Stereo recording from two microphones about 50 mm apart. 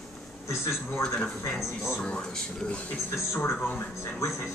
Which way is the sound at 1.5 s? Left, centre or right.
Centre.